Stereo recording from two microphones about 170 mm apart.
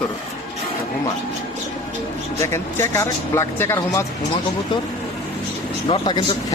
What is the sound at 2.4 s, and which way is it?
Speech, 15° left (ahead or behind).